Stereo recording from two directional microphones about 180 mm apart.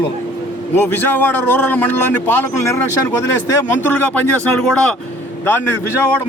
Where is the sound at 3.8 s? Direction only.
10° left (ahead or behind).